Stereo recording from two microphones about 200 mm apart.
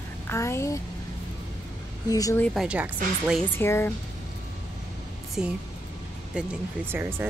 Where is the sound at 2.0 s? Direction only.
15° left (ahead or behind).